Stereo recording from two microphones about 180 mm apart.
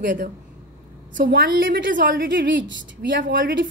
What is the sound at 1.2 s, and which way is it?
A woman's voice, 60° right (ahead or behind).